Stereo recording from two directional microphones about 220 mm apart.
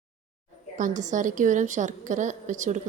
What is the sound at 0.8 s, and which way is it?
A woman's voice, 35° right (ahead or behind).